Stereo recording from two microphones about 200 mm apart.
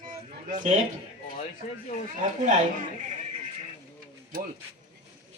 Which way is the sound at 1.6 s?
40° left (ahead or behind).